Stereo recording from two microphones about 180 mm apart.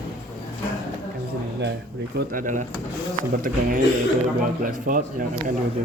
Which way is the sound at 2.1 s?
50° right (ahead or behind).